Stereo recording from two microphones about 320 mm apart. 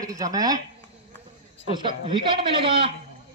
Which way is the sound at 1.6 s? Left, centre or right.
Centre.